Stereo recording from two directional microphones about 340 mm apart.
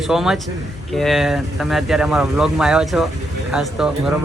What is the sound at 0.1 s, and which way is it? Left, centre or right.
Speech, centre.